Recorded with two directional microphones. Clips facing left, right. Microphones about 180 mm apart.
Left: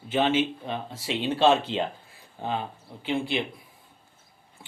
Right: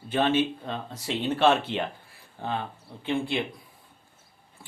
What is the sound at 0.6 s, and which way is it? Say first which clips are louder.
Speech: left 1 dB; 20° left (ahead or behind).